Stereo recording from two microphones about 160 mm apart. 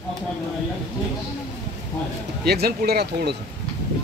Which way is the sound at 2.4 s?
85° right.